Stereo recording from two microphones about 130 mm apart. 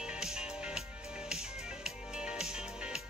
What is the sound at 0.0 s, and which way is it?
Music, 5° right (ahead or behind).